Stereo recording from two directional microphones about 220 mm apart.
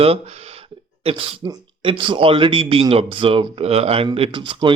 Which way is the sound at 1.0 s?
20° right (ahead or behind).